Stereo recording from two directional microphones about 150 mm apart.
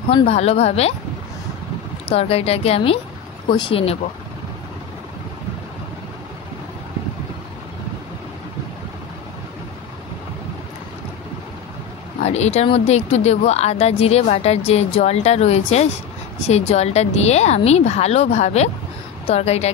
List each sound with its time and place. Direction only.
0.1 s speech: 45° left (ahead or behind)
2.0 s speech: 40° left (ahead or behind)
12.2 s speech: 50° left (ahead or behind)